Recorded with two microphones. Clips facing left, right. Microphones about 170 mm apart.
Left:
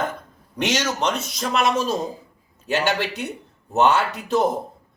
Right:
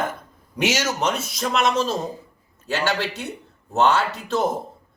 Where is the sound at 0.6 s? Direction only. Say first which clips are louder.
Even; 10° right (ahead or behind).